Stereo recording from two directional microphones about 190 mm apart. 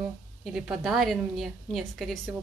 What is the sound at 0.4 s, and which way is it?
Speech, centre (ahead or behind).